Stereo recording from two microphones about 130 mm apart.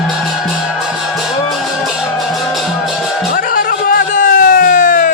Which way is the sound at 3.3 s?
90° left.